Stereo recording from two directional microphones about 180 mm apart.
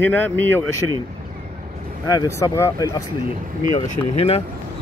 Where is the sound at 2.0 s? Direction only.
20° left (ahead or behind).